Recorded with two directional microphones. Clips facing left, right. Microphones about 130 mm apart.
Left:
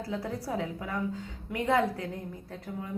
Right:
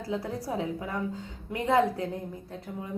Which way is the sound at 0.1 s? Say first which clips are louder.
Right 2 dB; 20° right (ahead or behind).